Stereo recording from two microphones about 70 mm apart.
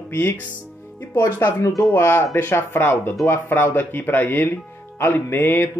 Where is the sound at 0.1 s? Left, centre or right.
Left.